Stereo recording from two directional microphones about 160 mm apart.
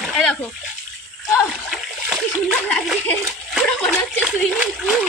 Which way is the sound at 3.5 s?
5° left (ahead or behind).